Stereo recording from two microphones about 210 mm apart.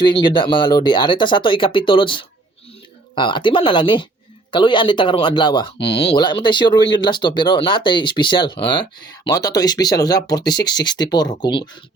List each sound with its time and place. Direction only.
0.0 s speech: 20° left (ahead or behind)